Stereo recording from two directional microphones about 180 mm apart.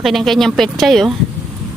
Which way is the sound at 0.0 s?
Centre (ahead or behind).